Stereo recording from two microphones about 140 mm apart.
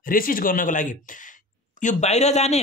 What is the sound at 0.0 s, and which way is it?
Speech, 90° left.